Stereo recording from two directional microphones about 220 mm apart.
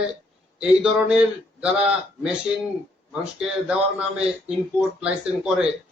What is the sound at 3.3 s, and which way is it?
A man's voice, 5° right (ahead or behind).